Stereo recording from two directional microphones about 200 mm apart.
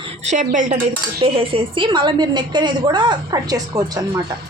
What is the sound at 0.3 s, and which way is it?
Speech, 35° right (ahead or behind).